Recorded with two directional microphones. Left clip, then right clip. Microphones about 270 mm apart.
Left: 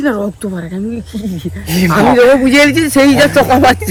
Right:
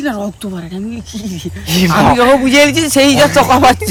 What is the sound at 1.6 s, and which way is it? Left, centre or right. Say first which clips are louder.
Speech: right 1 dB; right.